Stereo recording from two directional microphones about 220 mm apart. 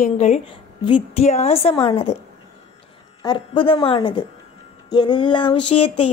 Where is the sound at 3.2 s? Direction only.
20° left (ahead or behind).